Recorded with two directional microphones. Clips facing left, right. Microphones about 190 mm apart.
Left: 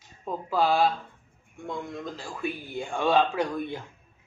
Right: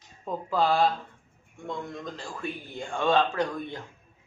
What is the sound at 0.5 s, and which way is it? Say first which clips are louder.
Speech: left 1 dB; 5° left (ahead or behind).